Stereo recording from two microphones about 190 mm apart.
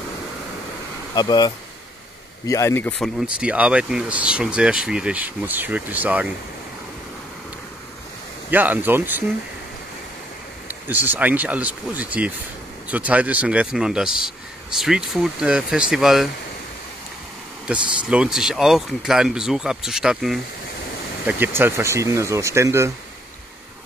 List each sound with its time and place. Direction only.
1.1 s speech: 20° left (ahead or behind)
3.0 s speech: 5° right (ahead or behind)
8.5 s speech: 10° right (ahead or behind)
10.7 s speech: 10° right (ahead or behind)
17.6 s speech: 5° right (ahead or behind)